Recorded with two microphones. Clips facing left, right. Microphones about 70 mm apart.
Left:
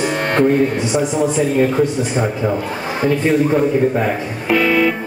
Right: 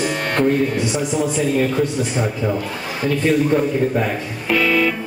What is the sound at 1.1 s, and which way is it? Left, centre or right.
A man's voice, left.